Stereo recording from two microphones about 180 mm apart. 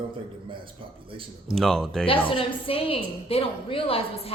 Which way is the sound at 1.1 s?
30° right (ahead or behind).